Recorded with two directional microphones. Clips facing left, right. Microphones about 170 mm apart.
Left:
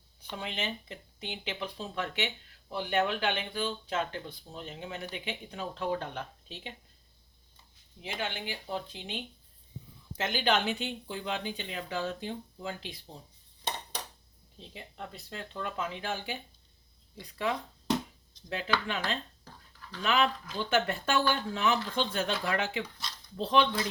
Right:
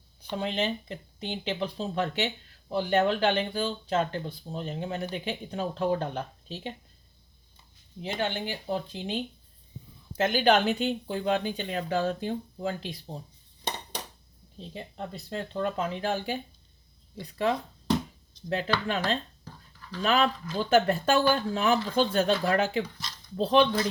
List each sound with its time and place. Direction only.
0.3 s speech: 35° right (ahead or behind)
8.0 s speech: 35° right (ahead or behind)
14.7 s speech: 35° right (ahead or behind)
18.4 s speech: 45° right (ahead or behind)